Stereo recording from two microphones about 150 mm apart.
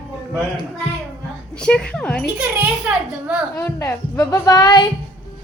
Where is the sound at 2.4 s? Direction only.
10° right (ahead or behind).